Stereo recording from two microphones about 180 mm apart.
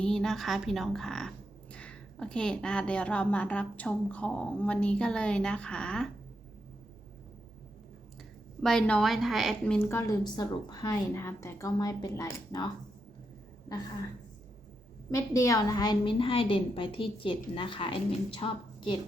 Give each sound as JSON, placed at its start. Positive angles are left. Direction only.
{"t": 0.0, "sound": "a woman's voice", "side_deg": 5}
{"t": 8.6, "sound": "a woman's voice", "side_deg": 5}
{"t": 9.7, "sound": "a woman's voice", "side_deg": 15}
{"t": 15.1, "sound": "a woman's voice", "side_deg": 20}